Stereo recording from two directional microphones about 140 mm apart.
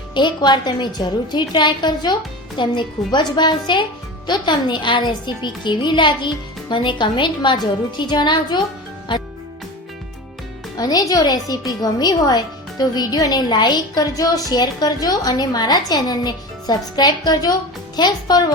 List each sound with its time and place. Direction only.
0.1 s a woman's voice: 30° left (ahead or behind)
10.8 s a woman's voice: 30° left (ahead or behind)